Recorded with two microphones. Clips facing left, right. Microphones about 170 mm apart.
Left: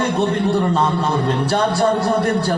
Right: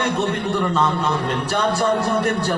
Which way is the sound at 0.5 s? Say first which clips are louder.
Left 2 dB; 35° left (ahead or behind).